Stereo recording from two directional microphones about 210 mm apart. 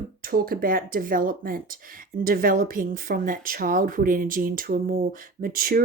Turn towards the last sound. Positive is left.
turn(degrees=-45)  # may be behind; listen again after turning